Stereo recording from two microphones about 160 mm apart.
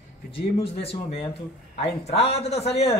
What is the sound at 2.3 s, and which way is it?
Speech, 40° left (ahead or behind).